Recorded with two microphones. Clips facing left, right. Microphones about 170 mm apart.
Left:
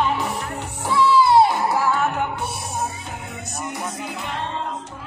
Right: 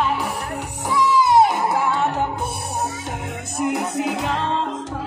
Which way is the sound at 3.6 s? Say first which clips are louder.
Right 9 dB; 90° right.